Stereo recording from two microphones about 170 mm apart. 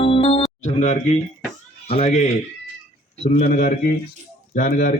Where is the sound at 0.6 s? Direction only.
45° left (ahead or behind).